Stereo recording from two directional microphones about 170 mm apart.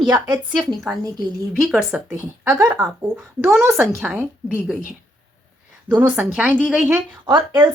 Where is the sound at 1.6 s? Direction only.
Centre (ahead or behind).